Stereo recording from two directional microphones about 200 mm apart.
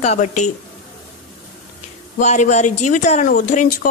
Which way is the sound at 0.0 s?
35° left (ahead or behind).